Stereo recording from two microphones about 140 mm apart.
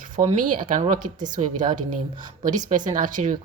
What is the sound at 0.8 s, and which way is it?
Speech, 65° right (ahead or behind).